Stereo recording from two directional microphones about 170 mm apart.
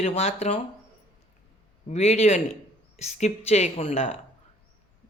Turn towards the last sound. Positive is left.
turn(degrees=35)  # may be behind; listen again after turning